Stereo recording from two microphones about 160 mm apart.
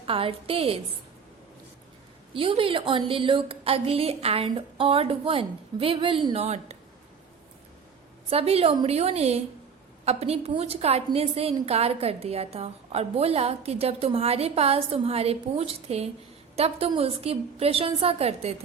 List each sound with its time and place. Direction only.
0.0 s a woman's voice: 35° right (ahead or behind)
2.3 s a woman's voice: 35° right (ahead or behind)
8.3 s a woman's voice: 40° right (ahead or behind)